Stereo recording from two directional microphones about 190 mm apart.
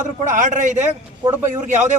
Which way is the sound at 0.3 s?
40° right (ahead or behind).